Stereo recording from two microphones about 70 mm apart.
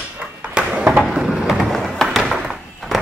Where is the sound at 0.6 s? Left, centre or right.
Centre.